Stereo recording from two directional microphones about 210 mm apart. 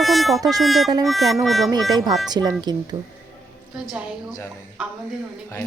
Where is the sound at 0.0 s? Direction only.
Centre (ahead or behind).